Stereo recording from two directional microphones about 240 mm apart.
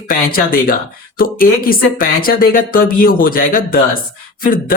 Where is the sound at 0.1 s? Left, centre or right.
Left.